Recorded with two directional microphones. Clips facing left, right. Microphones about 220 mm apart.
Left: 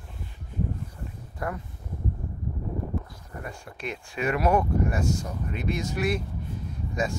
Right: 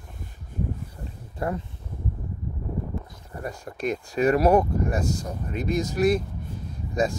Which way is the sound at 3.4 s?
40° right (ahead or behind).